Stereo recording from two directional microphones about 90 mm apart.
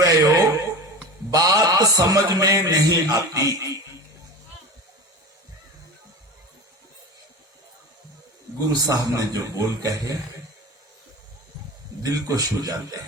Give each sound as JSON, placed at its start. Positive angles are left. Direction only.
{"t": 0.0, "sound": "a sound", "side_deg": -40}
{"t": 1.3, "sound": "a man's voice", "side_deg": -40}
{"t": 8.6, "sound": "a man's voice", "side_deg": -45}
{"t": 12.0, "sound": "a man's voice", "side_deg": -40}